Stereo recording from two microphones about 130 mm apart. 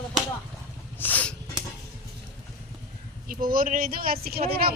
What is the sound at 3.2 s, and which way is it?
Speech, 90° right.